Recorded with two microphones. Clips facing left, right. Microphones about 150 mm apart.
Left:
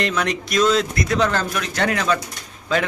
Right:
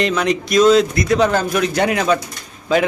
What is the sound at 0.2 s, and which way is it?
A man's voice, centre (ahead or behind).